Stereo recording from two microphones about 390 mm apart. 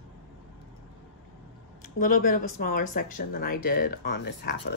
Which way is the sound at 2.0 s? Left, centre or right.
Left.